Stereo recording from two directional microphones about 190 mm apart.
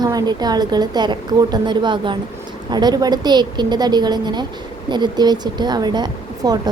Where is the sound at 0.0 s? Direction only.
20° right (ahead or behind).